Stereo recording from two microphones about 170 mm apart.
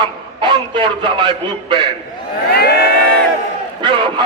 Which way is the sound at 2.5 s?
65° left (ahead or behind).